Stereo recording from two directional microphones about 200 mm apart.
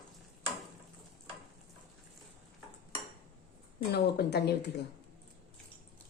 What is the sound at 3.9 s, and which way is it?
Speech, 55° left (ahead or behind).